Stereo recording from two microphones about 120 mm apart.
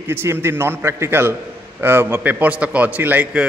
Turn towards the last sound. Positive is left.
turn(degrees=-10)  # may be behind; listen again after turning